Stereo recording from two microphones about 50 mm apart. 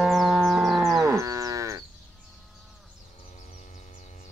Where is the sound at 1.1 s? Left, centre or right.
Right.